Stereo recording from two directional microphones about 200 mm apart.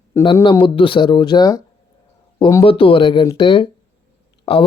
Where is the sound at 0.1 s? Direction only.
15° left (ahead or behind).